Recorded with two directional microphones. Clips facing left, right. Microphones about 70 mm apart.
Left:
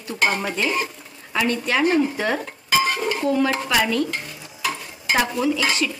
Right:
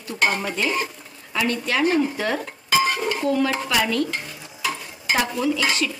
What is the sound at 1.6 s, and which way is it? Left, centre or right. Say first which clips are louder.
Speech: left 1 dB; left.